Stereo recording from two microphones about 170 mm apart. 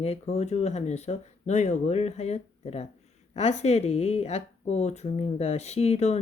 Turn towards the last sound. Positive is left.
turn(degrees=40)  # may be behind; listen again after turning